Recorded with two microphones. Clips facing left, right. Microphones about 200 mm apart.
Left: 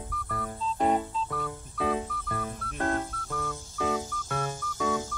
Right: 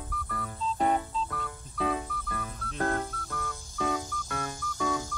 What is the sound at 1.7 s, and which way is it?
Music, 25° left (ahead or behind).